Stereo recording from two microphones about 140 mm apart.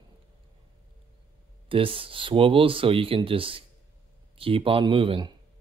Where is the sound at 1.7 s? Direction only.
40° right (ahead or behind).